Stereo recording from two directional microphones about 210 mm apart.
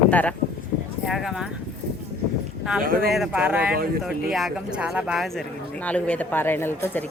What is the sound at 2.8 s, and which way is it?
Speech, 45° right (ahead or behind).